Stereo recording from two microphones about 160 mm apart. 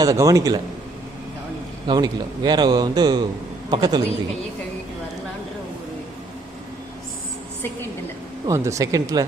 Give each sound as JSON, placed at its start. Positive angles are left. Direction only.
{"t": 0.0, "sound": "a man's voice", "side_deg": -20}
{"t": 1.9, "sound": "a man's voice", "side_deg": -25}
{"t": 8.4, "sound": "a man's voice", "side_deg": -20}